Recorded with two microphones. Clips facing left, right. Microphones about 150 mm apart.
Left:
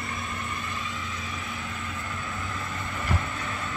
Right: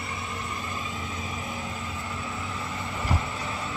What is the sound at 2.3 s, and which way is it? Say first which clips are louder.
Vehicle: right 1 dB; 20° right (ahead or behind).